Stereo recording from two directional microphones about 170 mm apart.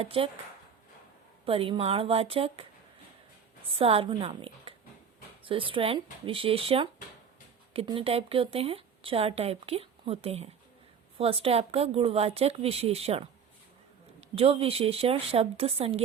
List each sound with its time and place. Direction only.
0.0 s a woman's voice: 35° right (ahead or behind)
1.5 s a woman's voice: 30° right (ahead or behind)
3.7 s a woman's voice: 35° right (ahead or behind)